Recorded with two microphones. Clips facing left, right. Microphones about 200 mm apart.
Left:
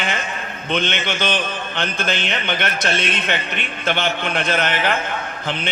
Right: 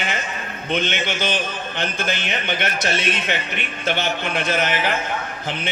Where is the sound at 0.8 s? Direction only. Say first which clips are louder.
Left 1 dB; 60° left (ahead or behind).